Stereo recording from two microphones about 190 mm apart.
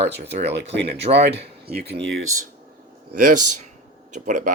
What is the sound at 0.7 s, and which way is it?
Speech, 65° right (ahead or behind).